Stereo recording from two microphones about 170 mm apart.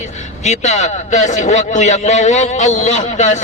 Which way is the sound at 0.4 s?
45° left (ahead or behind).